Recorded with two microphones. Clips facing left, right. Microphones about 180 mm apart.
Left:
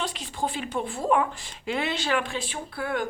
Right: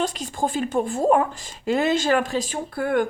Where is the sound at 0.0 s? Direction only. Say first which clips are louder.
Right 5 dB; 45° right (ahead or behind).